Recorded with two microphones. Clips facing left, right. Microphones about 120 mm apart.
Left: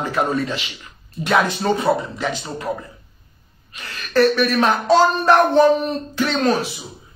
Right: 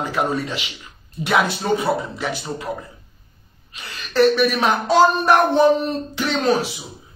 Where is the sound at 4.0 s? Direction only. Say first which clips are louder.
Even; 15° right (ahead or behind).